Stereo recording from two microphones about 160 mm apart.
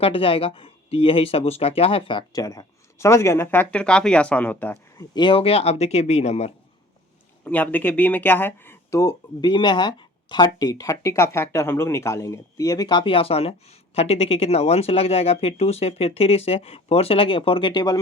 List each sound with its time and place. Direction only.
0.0 s speech: 35° left (ahead or behind); by 5.0 s 15° left (ahead or behind)
5.1 s speech: 35° left (ahead or behind)
7.4 s speech: 10° left (ahead or behind); by 18.0 s 25° left (ahead or behind)